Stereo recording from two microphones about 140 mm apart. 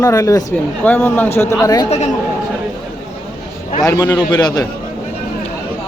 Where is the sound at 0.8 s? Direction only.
15° left (ahead or behind).